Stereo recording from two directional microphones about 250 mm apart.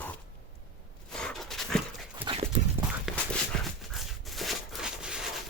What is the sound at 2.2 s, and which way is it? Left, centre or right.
Clip-clop, right.